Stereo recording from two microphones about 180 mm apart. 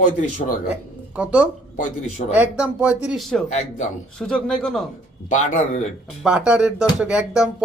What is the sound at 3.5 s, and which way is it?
Speech, 40° left (ahead or behind).